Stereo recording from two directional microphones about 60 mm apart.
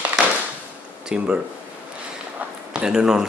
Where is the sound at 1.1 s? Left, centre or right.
Centre.